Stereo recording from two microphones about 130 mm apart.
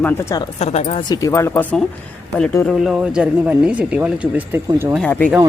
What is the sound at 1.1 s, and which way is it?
Speech, 25° left (ahead or behind).